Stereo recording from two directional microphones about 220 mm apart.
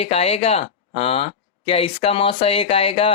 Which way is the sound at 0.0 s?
25° left (ahead or behind).